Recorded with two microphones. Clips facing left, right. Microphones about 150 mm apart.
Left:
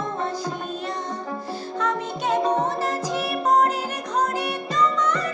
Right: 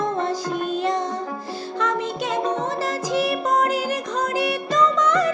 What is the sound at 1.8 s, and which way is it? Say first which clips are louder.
Music: right 2 dB; 90° right.